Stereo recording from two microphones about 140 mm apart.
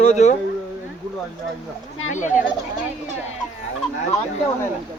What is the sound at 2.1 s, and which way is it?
Speech, 60° left (ahead or behind).